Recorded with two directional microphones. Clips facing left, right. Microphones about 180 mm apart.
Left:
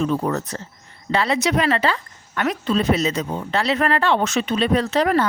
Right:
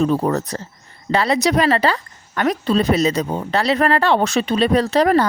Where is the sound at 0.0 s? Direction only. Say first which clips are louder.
Right 4 dB; 35° right (ahead or behind).